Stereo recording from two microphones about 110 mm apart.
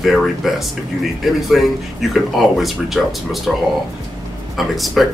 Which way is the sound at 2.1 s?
Centre (ahead or behind).